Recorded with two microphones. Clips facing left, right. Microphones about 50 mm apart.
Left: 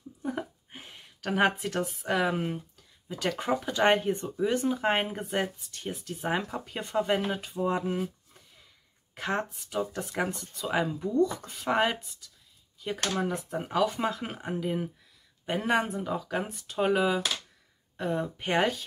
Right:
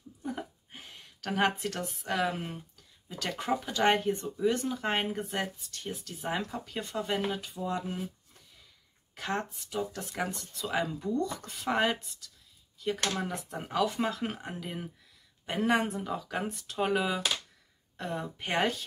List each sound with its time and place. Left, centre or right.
0.2 s a woman's voice: centre
9.1 s speech: left; by 18.9 s centre